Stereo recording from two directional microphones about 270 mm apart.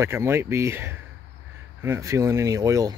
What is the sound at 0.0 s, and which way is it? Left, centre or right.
Speech, centre.